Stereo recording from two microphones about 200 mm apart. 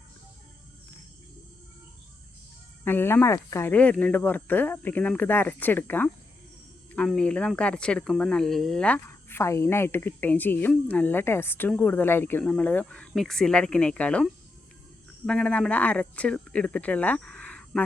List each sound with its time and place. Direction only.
2.8 s speech: 10° left (ahead or behind)
15.3 s speech: 5° left (ahead or behind)